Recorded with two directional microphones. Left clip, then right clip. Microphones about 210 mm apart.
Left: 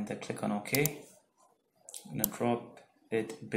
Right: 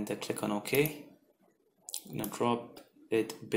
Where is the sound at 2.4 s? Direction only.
35° right (ahead or behind).